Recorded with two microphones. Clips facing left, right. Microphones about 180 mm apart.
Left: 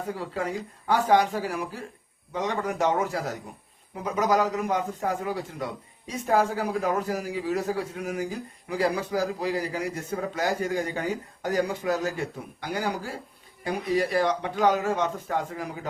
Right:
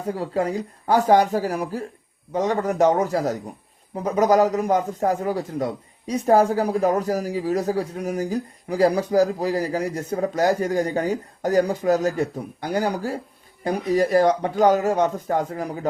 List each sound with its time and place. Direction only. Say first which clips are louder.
0.1 s a man's voice: right 8 dB; 40° right (ahead or behind)